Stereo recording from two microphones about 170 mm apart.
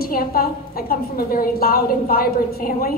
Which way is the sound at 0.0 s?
60° left (ahead or behind).